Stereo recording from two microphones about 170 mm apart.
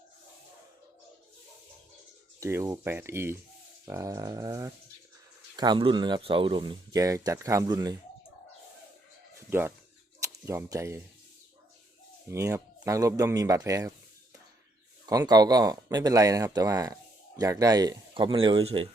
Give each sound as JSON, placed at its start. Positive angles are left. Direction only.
{"t": 2.4, "sound": "speech", "side_deg": -15}
{"t": 9.5, "sound": "speech", "side_deg": -10}
{"t": 12.3, "sound": "speech", "side_deg": -15}
{"t": 15.0, "sound": "speech", "side_deg": -20}